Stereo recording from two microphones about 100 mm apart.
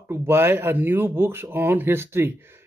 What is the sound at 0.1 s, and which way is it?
Speech, 25° right (ahead or behind).